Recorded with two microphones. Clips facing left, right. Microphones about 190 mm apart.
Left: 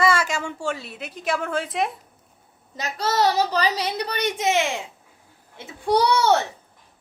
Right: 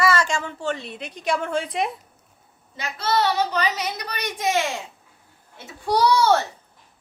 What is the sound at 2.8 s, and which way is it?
A child's voice, 40° left (ahead or behind).